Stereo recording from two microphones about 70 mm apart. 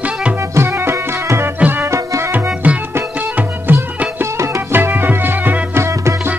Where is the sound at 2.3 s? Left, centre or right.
Right.